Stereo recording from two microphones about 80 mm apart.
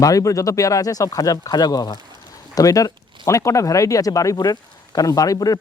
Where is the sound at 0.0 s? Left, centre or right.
Left.